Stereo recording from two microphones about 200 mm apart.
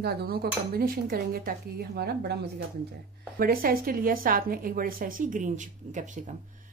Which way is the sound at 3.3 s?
45° right (ahead or behind).